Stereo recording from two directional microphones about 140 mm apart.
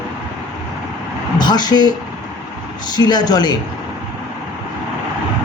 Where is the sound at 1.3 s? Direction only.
30° left (ahead or behind).